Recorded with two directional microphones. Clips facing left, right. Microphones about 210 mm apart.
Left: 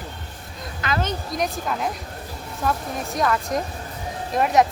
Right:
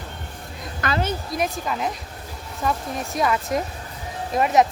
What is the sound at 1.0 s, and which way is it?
Speech, 5° right (ahead or behind).